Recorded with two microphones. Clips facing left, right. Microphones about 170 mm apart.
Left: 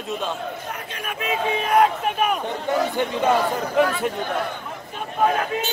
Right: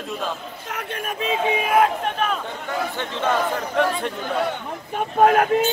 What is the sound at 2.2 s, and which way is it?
A man's voice, 15° left (ahead or behind).